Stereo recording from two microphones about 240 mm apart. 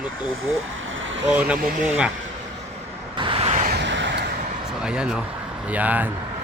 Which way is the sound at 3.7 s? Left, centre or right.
Right.